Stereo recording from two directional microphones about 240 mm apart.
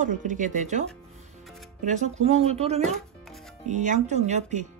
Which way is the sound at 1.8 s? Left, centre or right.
Right.